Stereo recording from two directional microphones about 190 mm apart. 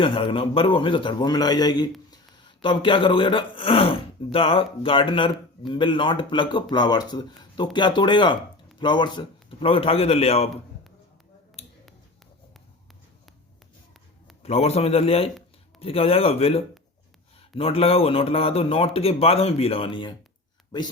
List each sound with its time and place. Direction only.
0.0 s a man's voice: 30° left (ahead or behind)
11.6 s finger snapping: 35° left (ahead or behind)
14.4 s a man's voice: 30° left (ahead or behind)